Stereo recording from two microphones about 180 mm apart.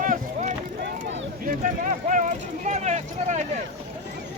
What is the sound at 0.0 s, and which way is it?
Run, 45° right (ahead or behind).